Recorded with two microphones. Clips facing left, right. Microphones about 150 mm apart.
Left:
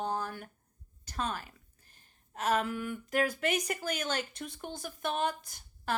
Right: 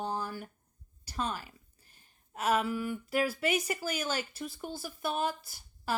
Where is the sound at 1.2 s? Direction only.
10° right (ahead or behind).